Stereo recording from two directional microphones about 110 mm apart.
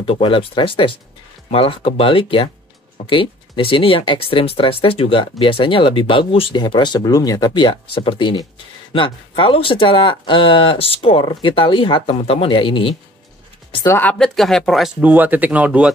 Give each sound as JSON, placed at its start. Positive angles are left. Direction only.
{"t": 0.0, "sound": "speech", "side_deg": 55}
{"t": 7.5, "sound": "speech", "side_deg": 50}
{"t": 14.1, "sound": "speech", "side_deg": 5}
{"t": 15.0, "sound": "speech", "side_deg": -15}